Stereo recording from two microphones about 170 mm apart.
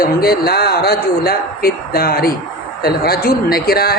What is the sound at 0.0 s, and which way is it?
Speech, 65° left (ahead or behind).